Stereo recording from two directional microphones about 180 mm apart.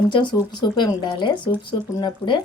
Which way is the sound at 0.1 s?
25° left (ahead or behind).